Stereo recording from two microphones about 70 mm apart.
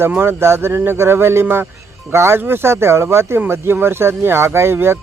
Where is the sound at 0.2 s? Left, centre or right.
Right.